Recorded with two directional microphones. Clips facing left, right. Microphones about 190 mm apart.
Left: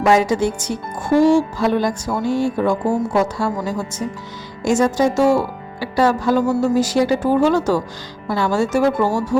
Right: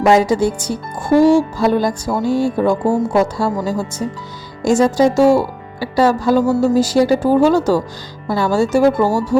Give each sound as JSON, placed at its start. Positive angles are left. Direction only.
{"t": 0.1, "sound": "speech", "side_deg": -35}